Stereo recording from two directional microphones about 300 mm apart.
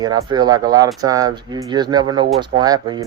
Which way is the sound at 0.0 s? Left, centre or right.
Centre.